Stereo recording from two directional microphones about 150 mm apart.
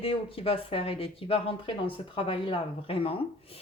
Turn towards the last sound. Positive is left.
turn(degrees=40)  # may be behind; listen again after turning